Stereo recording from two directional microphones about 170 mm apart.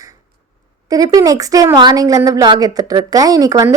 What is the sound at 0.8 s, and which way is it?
A woman's voice, 20° right (ahead or behind).